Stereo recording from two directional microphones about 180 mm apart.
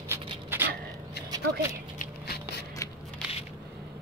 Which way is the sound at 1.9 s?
60° left (ahead or behind).